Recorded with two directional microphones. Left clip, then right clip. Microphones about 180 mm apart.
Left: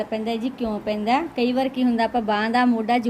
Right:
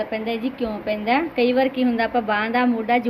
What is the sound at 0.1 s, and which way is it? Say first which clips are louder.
A woman's voice: right 1 dB; 70° left (ahead or behind).